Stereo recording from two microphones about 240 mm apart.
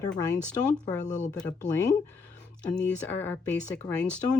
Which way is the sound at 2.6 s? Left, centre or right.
Centre.